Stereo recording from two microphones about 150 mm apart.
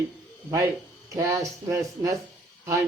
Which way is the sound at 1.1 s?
20° right (ahead or behind).